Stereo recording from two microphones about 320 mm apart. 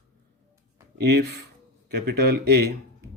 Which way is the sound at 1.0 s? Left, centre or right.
Right.